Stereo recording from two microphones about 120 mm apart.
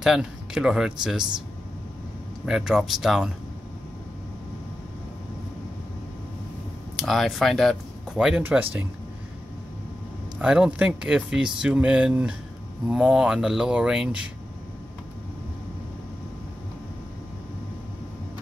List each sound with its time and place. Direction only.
0.0 s speech: 5° right (ahead or behind)
2.4 s speech: 5° right (ahead or behind)
7.0 s speech: centre (ahead or behind)
8.2 s speech: 10° right (ahead or behind)
10.4 s speech: 5° right (ahead or behind)